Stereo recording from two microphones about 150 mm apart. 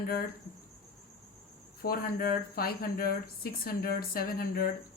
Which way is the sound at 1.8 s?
85° left.